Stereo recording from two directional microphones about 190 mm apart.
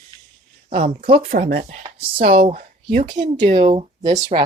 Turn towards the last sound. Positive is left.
turn(degrees=-35)  # may be behind; listen again after turning